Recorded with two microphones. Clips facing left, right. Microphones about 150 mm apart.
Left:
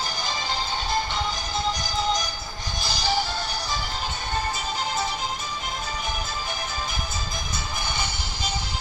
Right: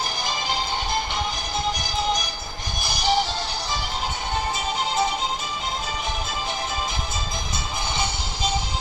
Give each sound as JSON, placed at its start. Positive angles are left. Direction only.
{"t": 2.8, "sound": "music", "side_deg": -20}